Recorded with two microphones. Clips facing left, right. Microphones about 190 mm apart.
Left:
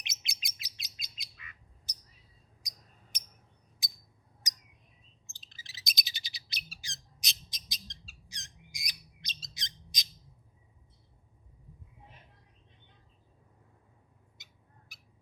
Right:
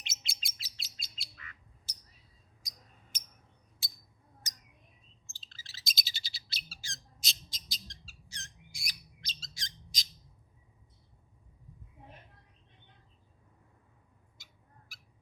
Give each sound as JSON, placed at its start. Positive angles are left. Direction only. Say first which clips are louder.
{"t": 0.0, "sound": "bird", "louder": "even", "side_deg": 15}
{"t": 3.1, "sound": "a sound", "louder": "even", "side_deg": 15}
{"t": 4.4, "sound": "bird", "louder": "left 1 dB", "side_deg": 15}
{"t": 14.3, "sound": "cat", "louder": "right 3 dB", "side_deg": 20}